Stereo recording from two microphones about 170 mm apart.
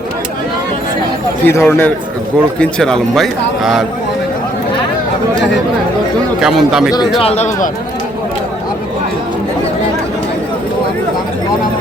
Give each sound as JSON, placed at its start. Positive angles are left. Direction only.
{"t": 1.5, "sound": "a man's voice", "side_deg": 15}
{"t": 6.4, "sound": "a man's voice", "side_deg": 0}
{"t": 7.2, "sound": "a man's voice", "side_deg": 40}